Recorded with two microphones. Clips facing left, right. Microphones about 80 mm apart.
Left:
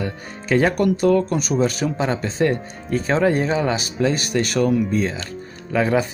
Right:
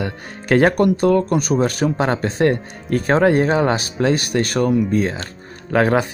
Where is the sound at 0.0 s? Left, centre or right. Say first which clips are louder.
Right 1 dB; right.